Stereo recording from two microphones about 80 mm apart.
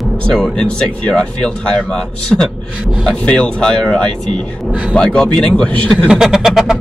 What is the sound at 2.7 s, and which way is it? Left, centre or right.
Speech, centre.